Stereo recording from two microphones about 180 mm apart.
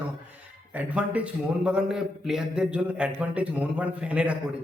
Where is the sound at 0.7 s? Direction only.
10° right (ahead or behind).